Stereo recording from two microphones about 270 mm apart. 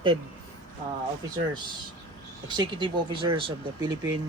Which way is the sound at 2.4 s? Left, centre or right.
Centre.